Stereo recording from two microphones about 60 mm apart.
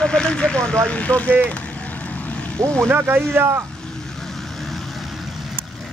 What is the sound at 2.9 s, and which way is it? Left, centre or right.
Speech, right.